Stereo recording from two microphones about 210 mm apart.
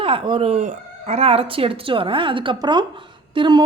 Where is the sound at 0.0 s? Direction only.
25° right (ahead or behind).